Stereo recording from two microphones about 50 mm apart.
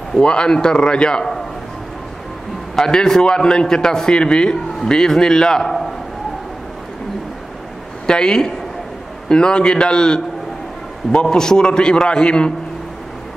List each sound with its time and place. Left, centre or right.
0.1 s a man's voice: centre
2.7 s a man's voice: centre
8.1 s a man's voice: centre